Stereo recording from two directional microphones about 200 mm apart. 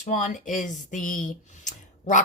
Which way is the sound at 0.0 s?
40° left (ahead or behind).